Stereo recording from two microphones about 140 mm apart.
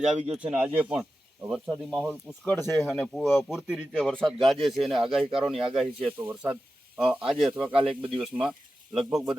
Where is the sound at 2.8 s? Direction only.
Centre (ahead or behind).